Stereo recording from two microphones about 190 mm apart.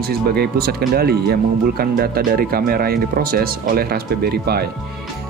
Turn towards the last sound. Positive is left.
turn(degrees=-55)  # may be behind; listen again after turning